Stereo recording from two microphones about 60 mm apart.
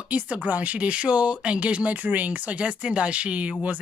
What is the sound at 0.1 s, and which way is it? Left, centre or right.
Speech, right.